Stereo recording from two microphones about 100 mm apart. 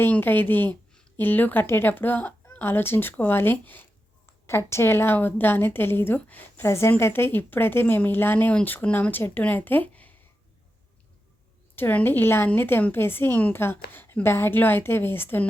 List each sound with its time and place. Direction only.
0.0 s a woman's voice: 20° left (ahead or behind)
11.8 s a woman's voice: 20° left (ahead or behind)